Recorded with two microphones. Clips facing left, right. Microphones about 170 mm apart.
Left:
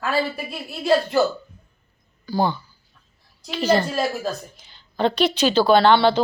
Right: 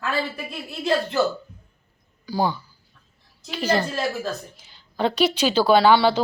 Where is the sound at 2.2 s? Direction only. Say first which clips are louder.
Left 2 dB; 10° right (ahead or behind).